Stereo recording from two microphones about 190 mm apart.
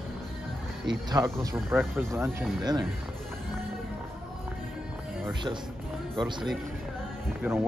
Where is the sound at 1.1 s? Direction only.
15° right (ahead or behind).